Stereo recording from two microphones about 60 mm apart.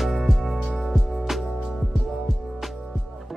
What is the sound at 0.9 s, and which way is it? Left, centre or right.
Music, centre.